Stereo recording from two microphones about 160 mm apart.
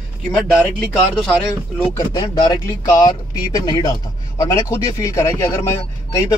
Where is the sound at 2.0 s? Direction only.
25° left (ahead or behind).